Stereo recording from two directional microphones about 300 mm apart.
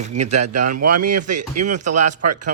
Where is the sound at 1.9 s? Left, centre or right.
Right.